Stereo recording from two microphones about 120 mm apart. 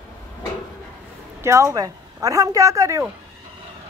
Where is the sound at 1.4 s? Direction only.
25° right (ahead or behind).